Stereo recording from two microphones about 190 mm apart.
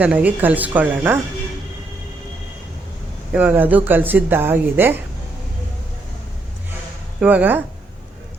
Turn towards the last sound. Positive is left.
turn(degrees=-10)  # may be behind; listen again after turning